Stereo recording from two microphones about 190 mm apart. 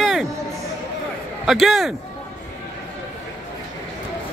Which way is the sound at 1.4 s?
Centre (ahead or behind).